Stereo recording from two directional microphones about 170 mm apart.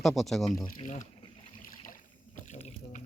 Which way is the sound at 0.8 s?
45° left (ahead or behind).